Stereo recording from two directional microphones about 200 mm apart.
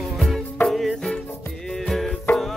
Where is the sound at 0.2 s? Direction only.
Centre (ahead or behind).